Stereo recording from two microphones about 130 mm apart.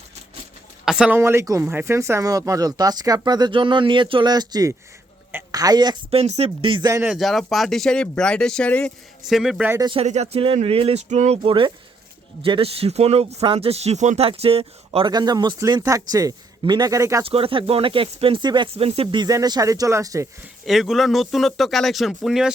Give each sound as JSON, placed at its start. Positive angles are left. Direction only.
{"t": 0.9, "sound": "a sound", "side_deg": -5}
{"t": 1.2, "sound": "speech", "side_deg": -20}
{"t": 6.1, "sound": "speech", "side_deg": -55}
{"t": 7.0, "sound": "speech", "side_deg": 0}
{"t": 9.3, "sound": "speech", "side_deg": -5}
{"t": 10.0, "sound": "speech", "side_deg": -55}
{"t": 11.4, "sound": "speech", "side_deg": -40}
{"t": 14.3, "sound": "speech", "side_deg": -45}
{"t": 15.1, "sound": "speech", "side_deg": -35}
{"t": 17.2, "sound": "speech", "side_deg": -45}
{"t": 18.9, "sound": "speech", "side_deg": -50}
{"t": 19.2, "sound": "speech", "side_deg": -30}
{"t": 20.7, "sound": "speech", "side_deg": 0}